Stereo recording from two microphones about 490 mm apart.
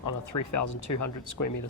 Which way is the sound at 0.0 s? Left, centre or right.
Left.